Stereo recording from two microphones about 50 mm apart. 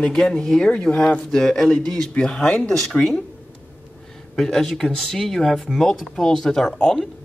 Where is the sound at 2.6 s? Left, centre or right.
Centre.